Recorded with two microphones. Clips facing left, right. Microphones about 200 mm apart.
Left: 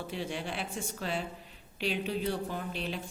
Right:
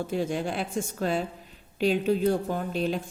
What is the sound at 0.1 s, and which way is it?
Speech, 45° right (ahead or behind).